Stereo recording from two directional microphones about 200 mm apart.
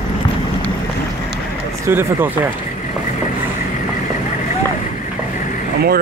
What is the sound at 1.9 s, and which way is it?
Speech, 10° right (ahead or behind).